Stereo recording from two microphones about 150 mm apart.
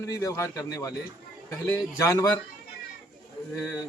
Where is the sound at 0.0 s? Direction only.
20° left (ahead or behind).